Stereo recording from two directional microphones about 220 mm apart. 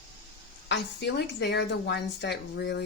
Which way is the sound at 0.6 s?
50° left (ahead or behind).